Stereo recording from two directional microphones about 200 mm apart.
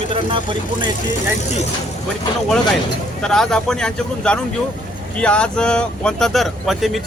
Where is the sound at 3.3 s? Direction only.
Centre (ahead or behind).